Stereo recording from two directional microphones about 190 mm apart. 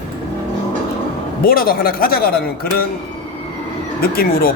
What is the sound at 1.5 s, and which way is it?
Speech, 50° left (ahead or behind).